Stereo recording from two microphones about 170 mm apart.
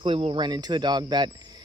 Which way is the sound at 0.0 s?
30° right (ahead or behind).